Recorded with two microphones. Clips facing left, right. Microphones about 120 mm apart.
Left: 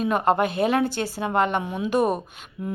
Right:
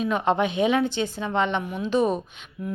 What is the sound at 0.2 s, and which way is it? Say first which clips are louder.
A woman's voice: even; 5° left (ahead or behind).